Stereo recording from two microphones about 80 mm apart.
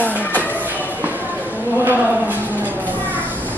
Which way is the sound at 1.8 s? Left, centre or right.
Right.